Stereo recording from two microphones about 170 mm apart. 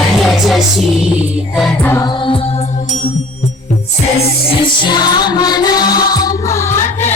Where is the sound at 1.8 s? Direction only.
15° left (ahead or behind).